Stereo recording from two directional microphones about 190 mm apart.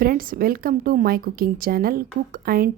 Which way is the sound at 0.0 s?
50° right (ahead or behind).